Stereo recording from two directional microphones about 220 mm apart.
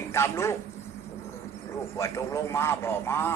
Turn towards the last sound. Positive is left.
turn(degrees=10)  # may be behind; listen again after turning